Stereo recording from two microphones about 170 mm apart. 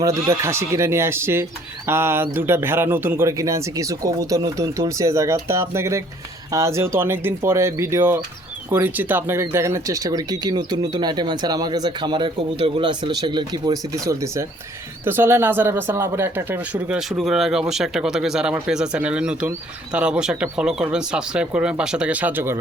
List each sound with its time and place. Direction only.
0.0 s a man's voice: 20° right (ahead or behind)